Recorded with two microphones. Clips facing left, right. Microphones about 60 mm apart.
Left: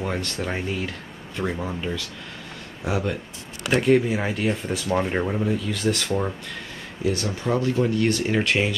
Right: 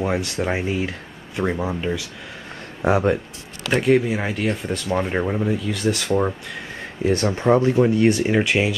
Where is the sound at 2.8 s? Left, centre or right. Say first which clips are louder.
Right 8 dB; right.